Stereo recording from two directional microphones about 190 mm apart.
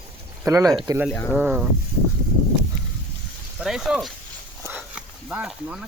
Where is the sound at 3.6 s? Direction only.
5° right (ahead or behind).